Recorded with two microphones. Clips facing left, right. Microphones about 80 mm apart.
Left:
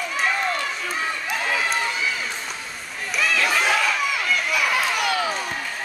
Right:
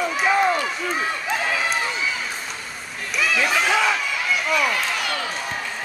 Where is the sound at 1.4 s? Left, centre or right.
Centre.